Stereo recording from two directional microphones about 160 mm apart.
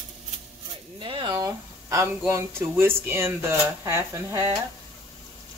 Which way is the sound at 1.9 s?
20° right (ahead or behind).